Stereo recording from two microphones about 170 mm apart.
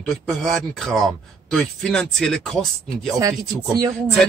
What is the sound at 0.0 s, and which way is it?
Speech, centre (ahead or behind).